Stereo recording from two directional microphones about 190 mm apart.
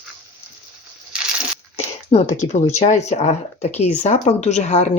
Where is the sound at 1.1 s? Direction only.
5° right (ahead or behind).